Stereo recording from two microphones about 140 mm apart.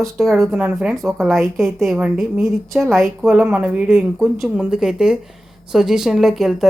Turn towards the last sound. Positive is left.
turn(degrees=0)  # may be behind; listen again after turning